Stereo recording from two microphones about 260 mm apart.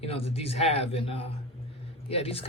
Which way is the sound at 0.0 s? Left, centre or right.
Left.